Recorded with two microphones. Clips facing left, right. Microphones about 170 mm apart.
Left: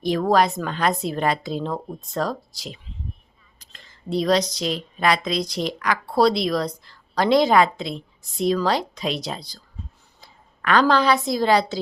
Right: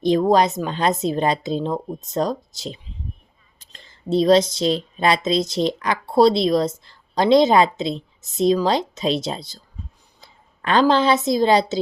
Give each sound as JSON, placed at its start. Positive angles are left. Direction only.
{"t": 0.0, "sound": "a woman's voice", "side_deg": -20}